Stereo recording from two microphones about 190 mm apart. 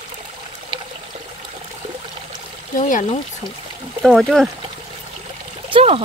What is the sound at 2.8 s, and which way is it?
Speech, 45° left (ahead or behind).